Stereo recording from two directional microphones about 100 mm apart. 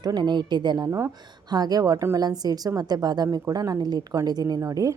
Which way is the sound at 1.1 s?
45° right (ahead or behind).